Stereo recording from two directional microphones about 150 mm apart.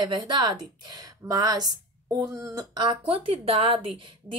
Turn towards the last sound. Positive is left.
turn(degrees=-35)  # may be behind; listen again after turning